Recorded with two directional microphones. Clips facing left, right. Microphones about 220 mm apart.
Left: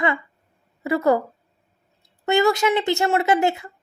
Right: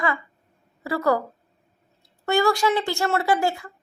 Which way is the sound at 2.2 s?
20° left (ahead or behind).